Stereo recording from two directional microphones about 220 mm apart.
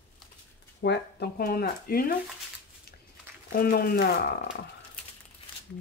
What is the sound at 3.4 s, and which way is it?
Speech, 45° left (ahead or behind).